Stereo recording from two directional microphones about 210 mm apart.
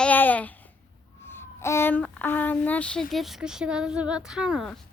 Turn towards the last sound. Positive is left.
turn(degrees=0)  # may be behind; listen again after turning